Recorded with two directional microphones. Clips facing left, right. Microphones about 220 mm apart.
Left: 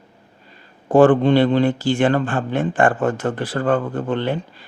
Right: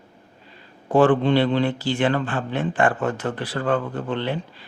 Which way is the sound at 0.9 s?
45° left (ahead or behind).